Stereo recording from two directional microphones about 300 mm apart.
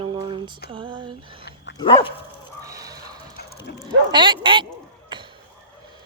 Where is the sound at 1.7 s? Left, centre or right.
Centre.